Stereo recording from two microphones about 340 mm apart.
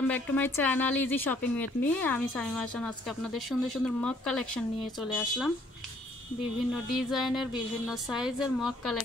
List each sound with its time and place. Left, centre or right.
0.1 s speech: centre
6.9 s speech: centre